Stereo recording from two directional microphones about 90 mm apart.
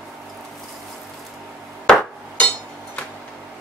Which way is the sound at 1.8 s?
10° left (ahead or behind).